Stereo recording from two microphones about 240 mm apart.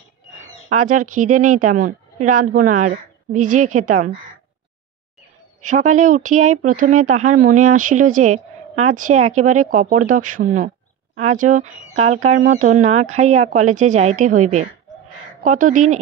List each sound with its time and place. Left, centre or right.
0.4 s a woman's voice: right
5.9 s speech: right